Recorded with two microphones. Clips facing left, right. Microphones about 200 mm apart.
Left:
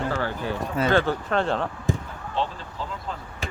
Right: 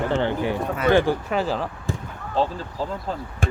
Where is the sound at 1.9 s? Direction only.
20° left (ahead or behind).